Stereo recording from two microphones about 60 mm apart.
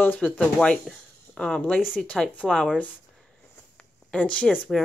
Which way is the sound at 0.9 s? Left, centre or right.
Centre.